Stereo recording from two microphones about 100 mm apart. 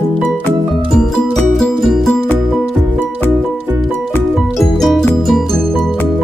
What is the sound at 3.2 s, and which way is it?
Music, 20° right (ahead or behind).